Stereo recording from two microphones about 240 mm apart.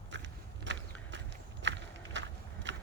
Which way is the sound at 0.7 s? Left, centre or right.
Right.